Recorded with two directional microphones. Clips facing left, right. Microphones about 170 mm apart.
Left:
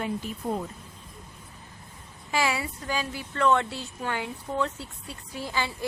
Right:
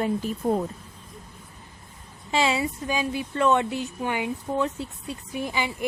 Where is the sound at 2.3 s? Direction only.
25° right (ahead or behind).